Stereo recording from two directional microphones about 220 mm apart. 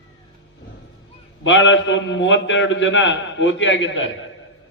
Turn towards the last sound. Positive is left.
turn(degrees=60)  # may be behind; listen again after turning